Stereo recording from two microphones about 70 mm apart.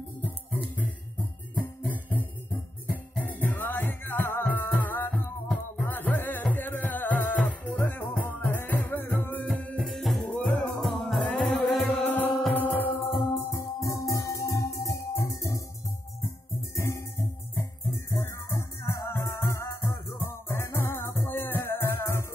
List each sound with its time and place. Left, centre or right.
1.6 s music: left
9.8 s music: centre
10.2 s music: left; by 11.9 s centre
12.0 s music: left
13.5 s music: left
16.7 s music: left
17.6 s music: left
20.9 s music: left